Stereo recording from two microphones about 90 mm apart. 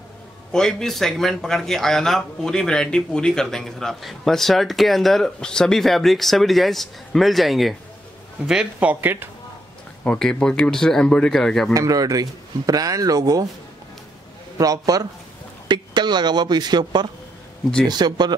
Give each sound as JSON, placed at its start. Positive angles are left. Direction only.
{"t": 0.5, "sound": "speech", "side_deg": 5}
{"t": 8.7, "sound": "speech", "side_deg": -20}
{"t": 10.0, "sound": "speech", "side_deg": 10}
{"t": 11.7, "sound": "speech", "side_deg": -40}
{"t": 14.6, "sound": "speech", "side_deg": -45}
{"t": 15.7, "sound": "speech", "side_deg": -55}